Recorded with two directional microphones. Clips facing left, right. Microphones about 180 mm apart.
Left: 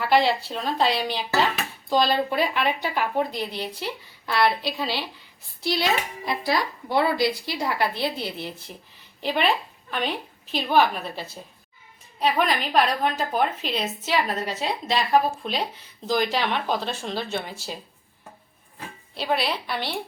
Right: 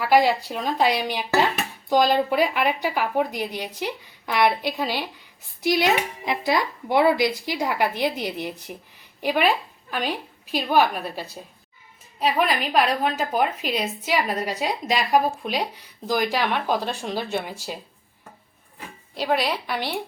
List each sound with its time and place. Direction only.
0.3 s speech: 15° right (ahead or behind)
10.5 s speech: 10° right (ahead or behind)
19.1 s speech: 15° right (ahead or behind)